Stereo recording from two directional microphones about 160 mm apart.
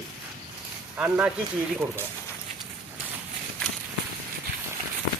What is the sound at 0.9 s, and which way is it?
Speech, 10° right (ahead or behind).